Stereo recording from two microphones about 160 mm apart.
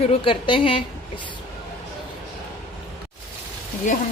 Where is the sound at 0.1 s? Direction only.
30° left (ahead or behind).